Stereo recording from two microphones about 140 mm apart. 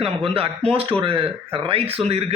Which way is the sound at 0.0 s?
40° right (ahead or behind).